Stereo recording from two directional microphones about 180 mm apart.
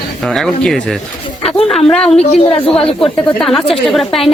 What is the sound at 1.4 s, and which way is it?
A woman's voice, centre (ahead or behind).